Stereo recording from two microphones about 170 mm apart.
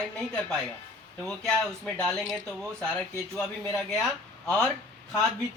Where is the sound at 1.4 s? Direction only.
Centre (ahead or behind).